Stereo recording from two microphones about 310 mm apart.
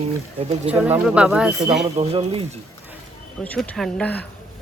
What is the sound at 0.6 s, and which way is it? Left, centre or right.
Speech, centre.